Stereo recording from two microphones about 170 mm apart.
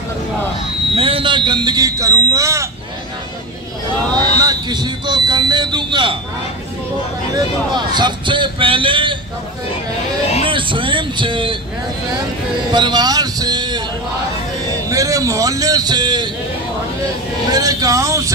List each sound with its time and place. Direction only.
0.9 s speech: 35° right (ahead or behind); by 2.7 s 15° right (ahead or behind)
4.4 s speech: 25° right (ahead or behind)
7.3 s speech: 25° right (ahead or behind)
10.4 s speech: 30° right (ahead or behind)
12.7 s speech: 25° right (ahead or behind)
14.9 s speech: 20° right (ahead or behind)
17.5 s speech: 20° right (ahead or behind)